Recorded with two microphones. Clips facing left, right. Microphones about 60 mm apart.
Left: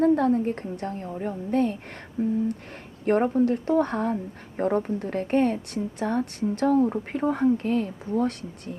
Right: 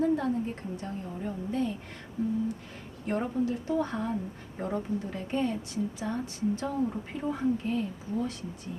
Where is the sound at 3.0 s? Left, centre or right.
Left.